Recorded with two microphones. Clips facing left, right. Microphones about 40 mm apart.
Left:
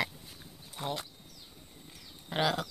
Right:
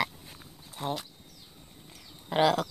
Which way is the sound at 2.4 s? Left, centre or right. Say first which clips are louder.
Right 6 dB; right.